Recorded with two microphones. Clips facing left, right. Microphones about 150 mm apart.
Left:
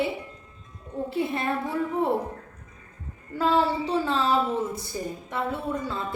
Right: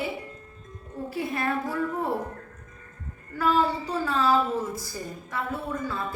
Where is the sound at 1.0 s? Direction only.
25° left (ahead or behind).